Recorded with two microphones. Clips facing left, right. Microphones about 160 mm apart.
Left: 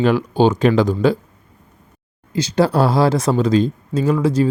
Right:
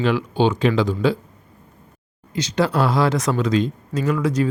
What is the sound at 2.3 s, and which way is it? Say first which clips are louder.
Speech: left 4 dB; 30° left (ahead or behind).